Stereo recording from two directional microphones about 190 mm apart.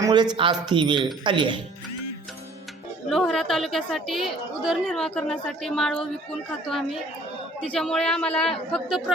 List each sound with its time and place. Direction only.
0.0 s speech: 20° right (ahead or behind)
3.1 s a woman's voice: centre (ahead or behind)